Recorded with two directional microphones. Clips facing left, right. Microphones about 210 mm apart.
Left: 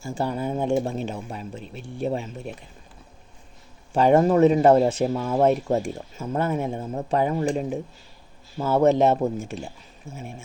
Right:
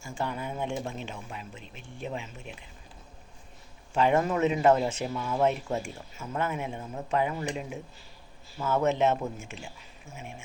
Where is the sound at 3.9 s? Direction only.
40° left (ahead or behind).